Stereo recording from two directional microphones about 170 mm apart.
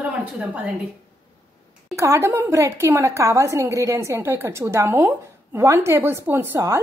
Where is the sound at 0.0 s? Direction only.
10° right (ahead or behind).